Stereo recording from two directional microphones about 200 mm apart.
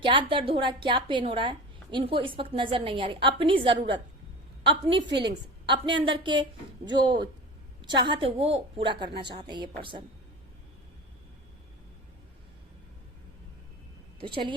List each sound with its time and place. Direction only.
0.0 s a woman's voice: 25° right (ahead or behind)
14.2 s a woman's voice: 25° right (ahead or behind)